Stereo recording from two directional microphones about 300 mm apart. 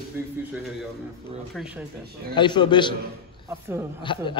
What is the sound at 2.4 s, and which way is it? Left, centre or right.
Speech, centre.